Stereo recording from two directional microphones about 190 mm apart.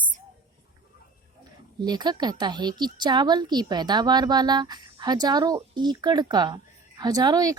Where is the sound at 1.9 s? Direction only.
20° right (ahead or behind).